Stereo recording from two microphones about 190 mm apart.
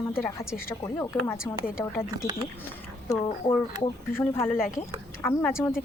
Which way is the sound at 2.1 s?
20° right (ahead or behind).